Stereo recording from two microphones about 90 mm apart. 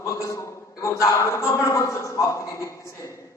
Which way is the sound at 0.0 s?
35° left (ahead or behind).